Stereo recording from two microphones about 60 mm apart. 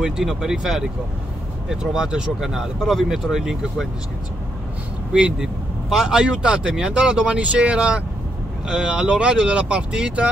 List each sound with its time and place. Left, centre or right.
0.0 s speech: centre
5.1 s speech: centre